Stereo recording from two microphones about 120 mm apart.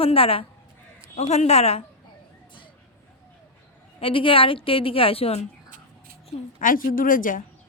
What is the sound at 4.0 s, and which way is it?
A woman's voice, 45° left (ahead or behind).